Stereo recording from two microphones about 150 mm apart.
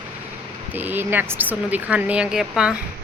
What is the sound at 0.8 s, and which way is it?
Speech, 15° right (ahead or behind).